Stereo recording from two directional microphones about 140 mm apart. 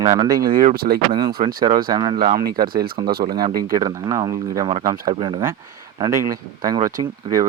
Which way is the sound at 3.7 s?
25° right (ahead or behind).